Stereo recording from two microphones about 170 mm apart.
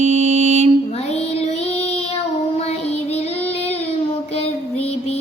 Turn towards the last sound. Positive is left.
turn(degrees=35)  # may be behind; listen again after turning